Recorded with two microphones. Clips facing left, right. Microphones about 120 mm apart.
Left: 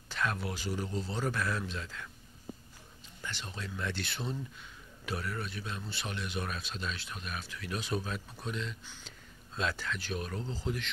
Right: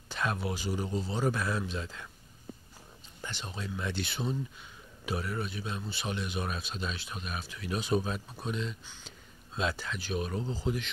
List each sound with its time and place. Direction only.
0.1 s a man's voice: 20° right (ahead or behind)
3.2 s a man's voice: 20° right (ahead or behind)